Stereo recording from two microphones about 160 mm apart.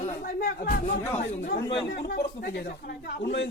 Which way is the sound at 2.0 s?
80° left.